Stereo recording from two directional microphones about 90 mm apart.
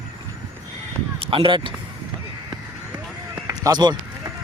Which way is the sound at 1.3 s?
70° right (ahead or behind).